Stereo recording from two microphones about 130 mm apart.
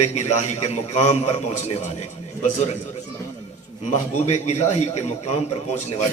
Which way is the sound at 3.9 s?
60° left (ahead or behind).